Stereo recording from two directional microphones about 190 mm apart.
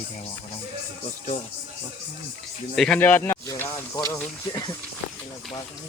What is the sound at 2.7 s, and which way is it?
Speech, 5° left (ahead or behind).